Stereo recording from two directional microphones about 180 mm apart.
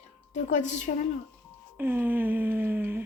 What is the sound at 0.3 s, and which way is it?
Speech, 40° left (ahead or behind).